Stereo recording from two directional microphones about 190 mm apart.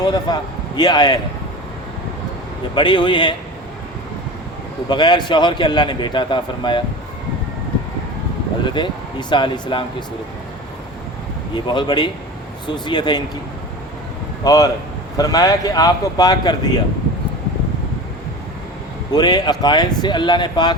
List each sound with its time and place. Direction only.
0.0 s a man's voice: 20° left (ahead or behind)
2.7 s a man's voice: 25° left (ahead or behind)
4.9 s a man's voice: 25° left (ahead or behind)
8.6 s a man's voice: 25° left (ahead or behind)
11.5 s a man's voice: 25° left (ahead or behind)
14.4 s a man's voice: 20° left (ahead or behind)
19.1 s a man's voice: 20° left (ahead or behind)